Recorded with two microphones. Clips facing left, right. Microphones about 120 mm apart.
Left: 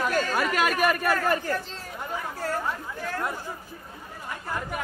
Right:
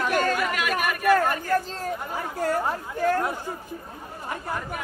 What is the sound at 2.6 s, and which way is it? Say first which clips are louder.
Speech: right 7 dB; 45° right (ahead or behind).